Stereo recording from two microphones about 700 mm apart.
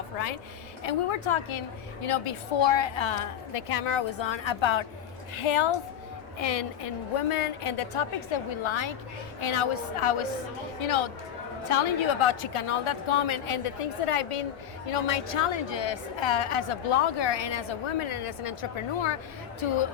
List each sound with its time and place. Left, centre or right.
0.9 s a woman's voice: left
6.4 s a woman's voice: left